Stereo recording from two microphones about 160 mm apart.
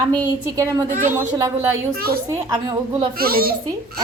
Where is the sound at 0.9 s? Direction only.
55° right (ahead or behind).